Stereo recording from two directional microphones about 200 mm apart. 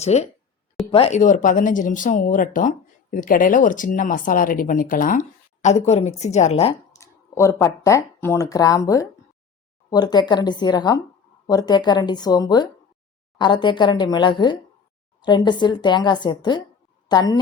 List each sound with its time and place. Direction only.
0.0 s speech: 35° left (ahead or behind)
7.0 s a woman's voice: 15° left (ahead or behind)